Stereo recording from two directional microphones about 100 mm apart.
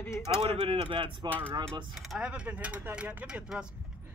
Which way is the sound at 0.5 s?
60° right (ahead or behind).